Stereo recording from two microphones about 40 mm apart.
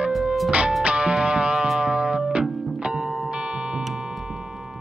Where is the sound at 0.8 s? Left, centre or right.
Right.